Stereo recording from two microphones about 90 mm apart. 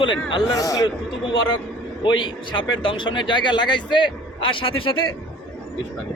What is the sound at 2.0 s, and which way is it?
A man's voice, 65° left (ahead or behind).